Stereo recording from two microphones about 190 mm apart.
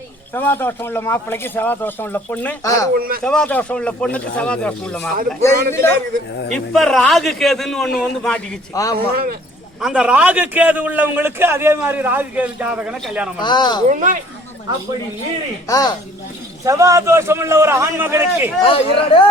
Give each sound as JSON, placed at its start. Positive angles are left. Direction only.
{"t": 0.3, "sound": "speech", "side_deg": 10}
{"t": 2.9, "sound": "speech", "side_deg": -50}
{"t": 3.2, "sound": "speech", "side_deg": 5}
{"t": 6.5, "sound": "a man's voice", "side_deg": 0}
{"t": 8.7, "sound": "speech", "side_deg": 20}
{"t": 9.8, "sound": "a man's voice", "side_deg": -5}
{"t": 13.4, "sound": "speech", "side_deg": 20}
{"t": 13.8, "sound": "speech", "side_deg": -40}
{"t": 15.7, "sound": "speech", "side_deg": 20}
{"t": 16.6, "sound": "a man's voice", "side_deg": -15}
{"t": 18.7, "sound": "speech", "side_deg": 30}